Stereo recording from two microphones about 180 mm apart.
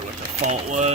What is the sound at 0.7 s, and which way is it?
Speech, 40° right (ahead or behind).